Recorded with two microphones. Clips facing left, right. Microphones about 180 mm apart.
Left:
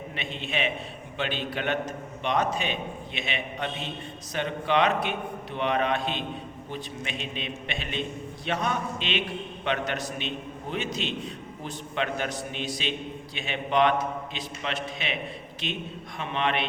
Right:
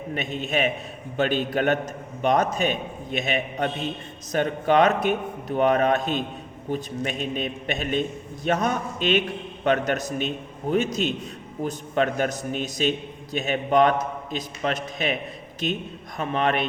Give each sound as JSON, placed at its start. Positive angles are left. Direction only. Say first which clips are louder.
{"t": 0.1, "sound": "a man's voice", "louder": "right 8 dB", "side_deg": -45}